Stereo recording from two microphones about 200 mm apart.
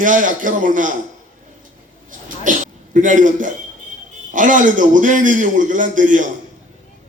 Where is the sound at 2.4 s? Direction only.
40° right (ahead or behind).